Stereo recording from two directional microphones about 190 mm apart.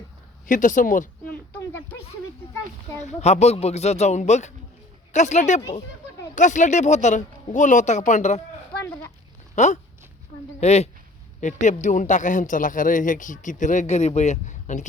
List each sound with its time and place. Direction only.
0.4 s speech: 45° left (ahead or behind)
1.3 s a sound: 10° left (ahead or behind)
3.0 s speech: 35° left (ahead or behind)
9.6 s a woman's voice: 40° left (ahead or behind)